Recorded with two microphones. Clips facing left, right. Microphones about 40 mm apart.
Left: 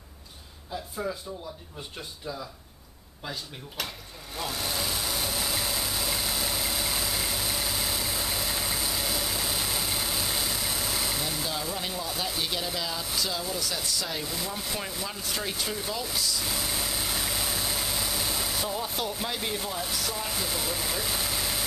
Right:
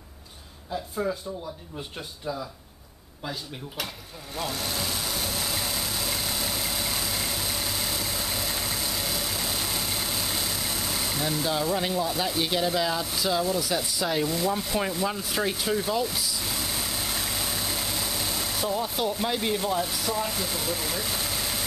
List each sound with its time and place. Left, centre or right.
1.0 s speech: centre
4.4 s vehicle: centre
15.1 s speech: centre